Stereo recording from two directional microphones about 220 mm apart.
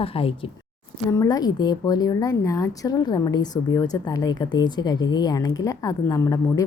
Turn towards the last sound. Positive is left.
turn(degrees=15)  # may be behind; listen again after turning